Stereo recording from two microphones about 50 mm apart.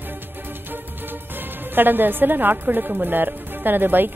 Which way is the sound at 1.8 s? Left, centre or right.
Right.